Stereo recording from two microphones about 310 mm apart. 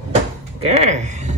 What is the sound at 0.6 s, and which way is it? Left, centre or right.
Speech, right.